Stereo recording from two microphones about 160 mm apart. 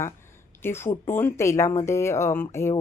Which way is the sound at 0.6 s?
15° left (ahead or behind).